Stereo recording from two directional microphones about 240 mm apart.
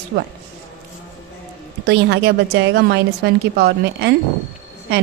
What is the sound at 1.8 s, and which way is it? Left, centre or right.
A woman's voice, right.